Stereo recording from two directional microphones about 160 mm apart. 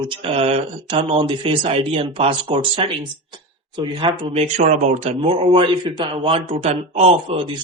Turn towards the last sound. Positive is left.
turn(degrees=-40)  # may be behind; listen again after turning